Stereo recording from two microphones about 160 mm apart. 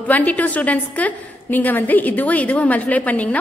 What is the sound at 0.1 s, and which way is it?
A woman's voice, 10° left (ahead or behind).